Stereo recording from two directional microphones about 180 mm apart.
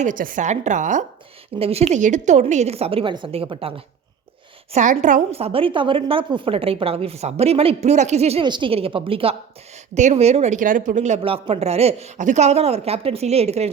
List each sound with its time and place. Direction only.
0.0 s a woman's voice: 50° right (ahead or behind); by 3.8 s 30° right (ahead or behind)
4.7 s a woman's voice: 40° right (ahead or behind)